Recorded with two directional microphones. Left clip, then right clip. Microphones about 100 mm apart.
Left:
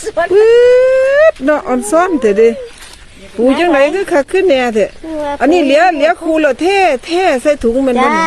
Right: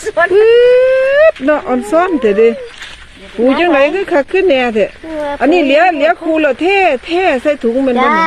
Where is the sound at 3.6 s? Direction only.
10° left (ahead or behind).